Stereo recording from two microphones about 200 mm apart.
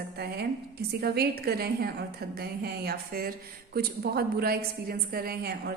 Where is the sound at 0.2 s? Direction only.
55° right (ahead or behind).